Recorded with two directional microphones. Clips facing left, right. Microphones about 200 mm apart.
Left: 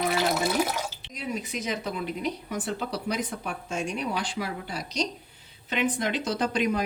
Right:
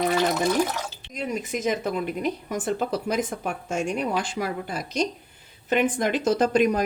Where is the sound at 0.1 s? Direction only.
10° left (ahead or behind).